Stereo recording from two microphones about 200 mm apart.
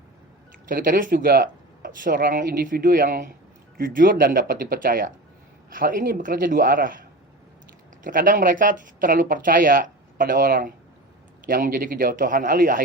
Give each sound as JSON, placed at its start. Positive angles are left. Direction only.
{"t": 0.7, "sound": "speech", "side_deg": -45}
{"t": 8.0, "sound": "speech", "side_deg": -45}